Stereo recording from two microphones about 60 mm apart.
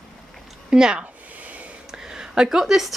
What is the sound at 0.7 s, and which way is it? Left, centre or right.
A woman's voice, centre.